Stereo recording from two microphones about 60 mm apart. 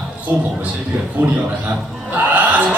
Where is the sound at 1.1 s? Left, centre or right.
Right.